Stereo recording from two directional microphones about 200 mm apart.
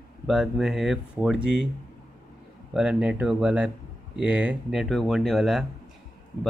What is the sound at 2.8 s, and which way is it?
Speech, 5° right (ahead or behind).